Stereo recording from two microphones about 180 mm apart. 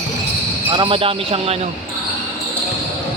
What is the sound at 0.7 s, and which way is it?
Speech, 30° right (ahead or behind).